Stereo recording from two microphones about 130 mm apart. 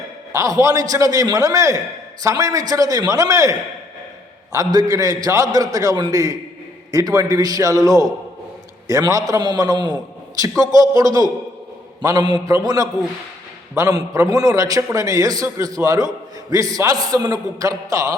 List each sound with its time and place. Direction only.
0.3 s a man's voice: 25° right (ahead or behind)
4.5 s a man's voice: 30° right (ahead or behind)